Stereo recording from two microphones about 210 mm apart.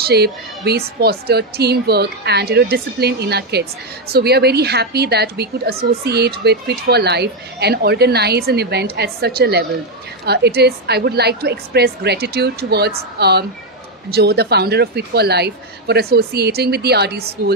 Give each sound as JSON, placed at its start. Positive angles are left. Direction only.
{"t": 0.0, "sound": "a woman's voice", "side_deg": -50}